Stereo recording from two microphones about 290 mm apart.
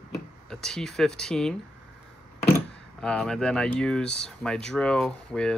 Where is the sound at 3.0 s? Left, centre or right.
Centre.